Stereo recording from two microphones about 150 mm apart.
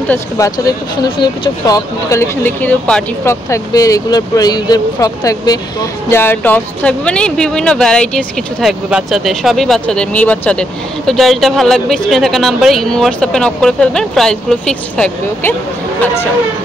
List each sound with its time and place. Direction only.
0.1 s speech: 20° left (ahead or behind); by 15.5 s 5° left (ahead or behind)